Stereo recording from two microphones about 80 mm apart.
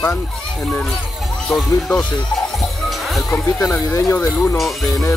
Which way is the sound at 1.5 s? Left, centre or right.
Centre.